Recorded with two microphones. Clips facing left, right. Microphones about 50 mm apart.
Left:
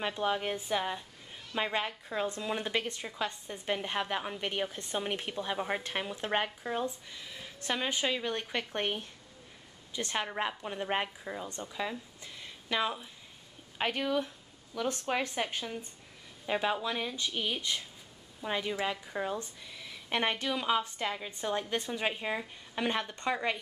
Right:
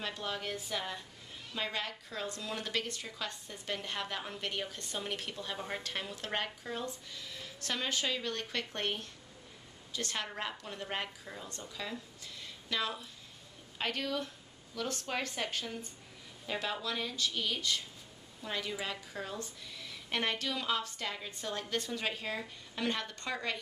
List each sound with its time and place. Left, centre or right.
0.0 s a woman's voice: left